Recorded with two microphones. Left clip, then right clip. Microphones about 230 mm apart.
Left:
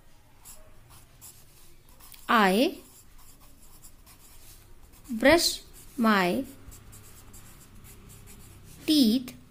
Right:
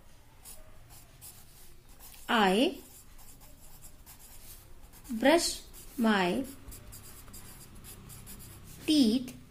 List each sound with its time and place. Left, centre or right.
2.2 s a woman's voice: left
5.2 s a child's voice: left
8.8 s a child's voice: left